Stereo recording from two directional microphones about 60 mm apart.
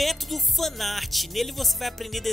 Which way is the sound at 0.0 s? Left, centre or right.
Centre.